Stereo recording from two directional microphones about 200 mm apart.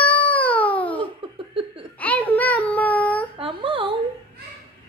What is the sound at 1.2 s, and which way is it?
Laughter, 25° right (ahead or behind).